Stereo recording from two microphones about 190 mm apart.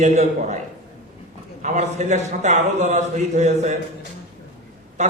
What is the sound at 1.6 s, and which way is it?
A man's voice, 40° right (ahead or behind).